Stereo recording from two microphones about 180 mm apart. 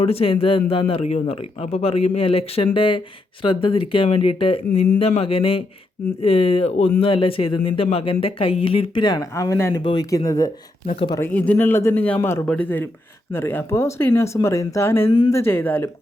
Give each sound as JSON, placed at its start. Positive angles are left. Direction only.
{"t": 0.0, "sound": "speech", "side_deg": 35}
{"t": 11.2, "sound": "speech", "side_deg": 10}